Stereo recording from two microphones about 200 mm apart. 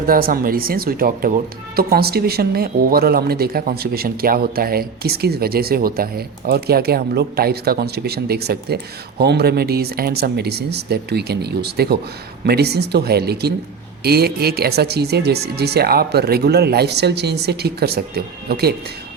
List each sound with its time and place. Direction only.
0.1 s speech: 45° right (ahead or behind)